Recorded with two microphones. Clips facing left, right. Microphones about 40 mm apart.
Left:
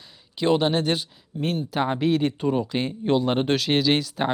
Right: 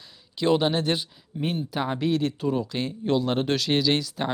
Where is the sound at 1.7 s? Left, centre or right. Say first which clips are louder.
Left 4 dB; centre.